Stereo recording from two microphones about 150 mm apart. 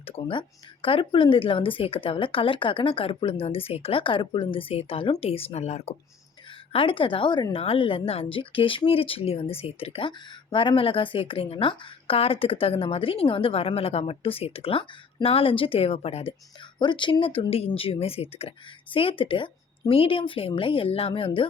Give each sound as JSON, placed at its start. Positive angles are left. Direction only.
{"t": 0.0, "sound": "a woman's voice", "side_deg": 40}
{"t": 6.7, "sound": "a woman's voice", "side_deg": 35}
{"t": 16.7, "sound": "a woman's voice", "side_deg": 30}